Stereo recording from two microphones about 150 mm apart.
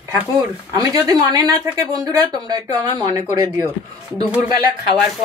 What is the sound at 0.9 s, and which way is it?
Speech, 25° right (ahead or behind).